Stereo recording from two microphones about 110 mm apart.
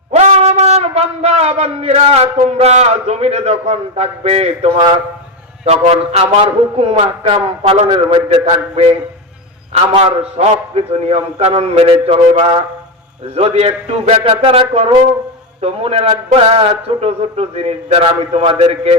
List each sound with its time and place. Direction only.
0.1 s a man's voice: 90° right; by 8.4 s 55° right (ahead or behind)
9.9 s a man's voice: 80° right; by 12.6 s 60° right (ahead or behind)
13.3 s a man's voice: 70° right (ahead or behind)